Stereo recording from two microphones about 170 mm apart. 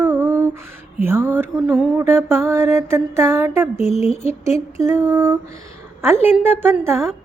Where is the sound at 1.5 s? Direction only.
Centre (ahead or behind).